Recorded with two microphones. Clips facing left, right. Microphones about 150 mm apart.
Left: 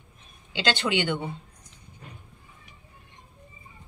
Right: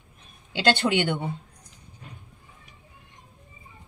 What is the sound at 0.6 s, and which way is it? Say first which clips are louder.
Speech: right 4 dB; 50° right (ahead or behind).